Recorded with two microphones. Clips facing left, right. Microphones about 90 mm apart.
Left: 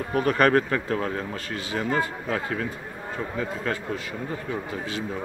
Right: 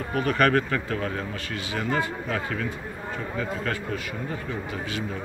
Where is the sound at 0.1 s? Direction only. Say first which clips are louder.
Left 2 dB; 40° left (ahead or behind).